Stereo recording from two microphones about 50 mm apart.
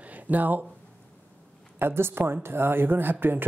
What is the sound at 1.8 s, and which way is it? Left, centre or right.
Speech, right.